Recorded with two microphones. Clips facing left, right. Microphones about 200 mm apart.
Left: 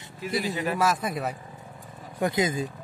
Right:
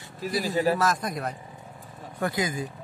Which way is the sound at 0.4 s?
40° right (ahead or behind).